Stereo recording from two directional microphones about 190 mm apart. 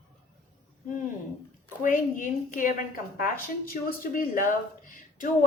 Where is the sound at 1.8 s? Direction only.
45° left (ahead or behind).